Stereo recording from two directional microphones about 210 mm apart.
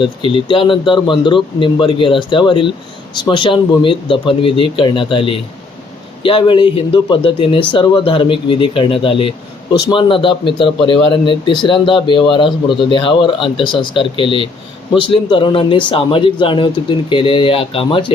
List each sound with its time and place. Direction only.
0.0 s a man's voice: 25° left (ahead or behind)